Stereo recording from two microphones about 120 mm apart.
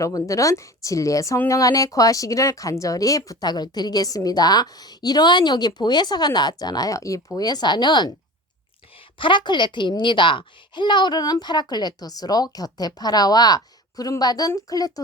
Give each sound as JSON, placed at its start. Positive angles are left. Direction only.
{"t": 0.0, "sound": "a child's voice", "side_deg": 25}
{"t": 9.1, "sound": "a child's voice", "side_deg": 40}